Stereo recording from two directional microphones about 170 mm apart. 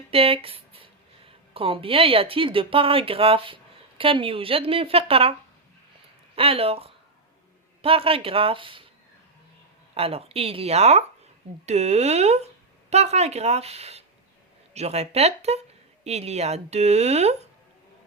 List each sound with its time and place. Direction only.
0.1 s speech: 35° right (ahead or behind)
6.3 s speech: 35° right (ahead or behind)
9.9 s speech: 35° right (ahead or behind)